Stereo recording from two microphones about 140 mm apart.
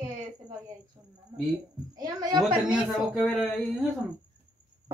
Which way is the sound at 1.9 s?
30° right (ahead or behind).